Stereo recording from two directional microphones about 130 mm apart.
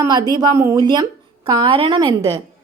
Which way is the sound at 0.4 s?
25° right (ahead or behind).